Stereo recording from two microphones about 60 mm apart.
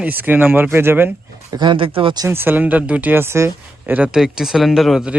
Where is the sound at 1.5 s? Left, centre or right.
Right.